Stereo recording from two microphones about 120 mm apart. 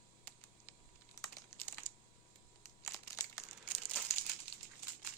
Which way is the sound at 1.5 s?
15° left (ahead or behind).